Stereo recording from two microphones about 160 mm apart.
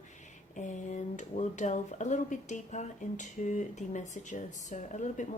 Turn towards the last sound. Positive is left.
turn(degrees=50)  # may be behind; listen again after turning